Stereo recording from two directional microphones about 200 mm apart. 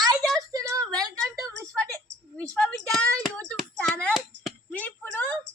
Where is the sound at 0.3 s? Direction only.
20° right (ahead or behind).